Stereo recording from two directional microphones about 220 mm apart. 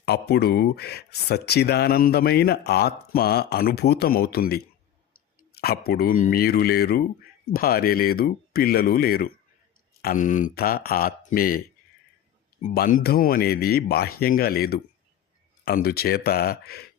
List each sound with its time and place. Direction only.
0.0 s speech: 45° left (ahead or behind)
12.7 s speech: 45° left (ahead or behind)